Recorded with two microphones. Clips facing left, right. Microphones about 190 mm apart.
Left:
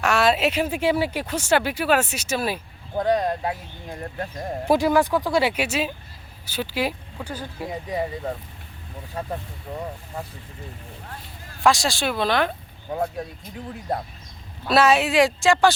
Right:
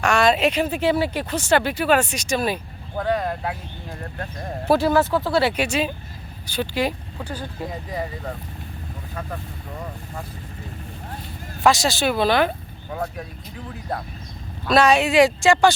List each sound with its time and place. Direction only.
0.0 s speech: 5° left (ahead or behind)
3.0 s speech: 20° left (ahead or behind)
9.2 s speech: 30° left (ahead or behind)
11.6 s speech: centre (ahead or behind)
14.7 s speech: 5° left (ahead or behind)